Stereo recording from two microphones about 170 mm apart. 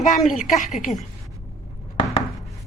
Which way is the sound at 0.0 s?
45° left (ahead or behind).